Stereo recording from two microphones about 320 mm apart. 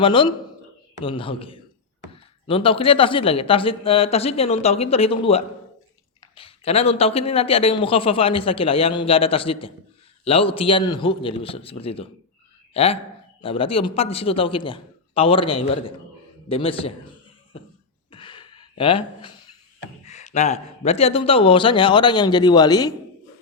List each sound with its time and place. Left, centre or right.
0.0 s speech: centre
16.5 s a sound: centre
18.1 s gasp: centre
20.1 s speech: left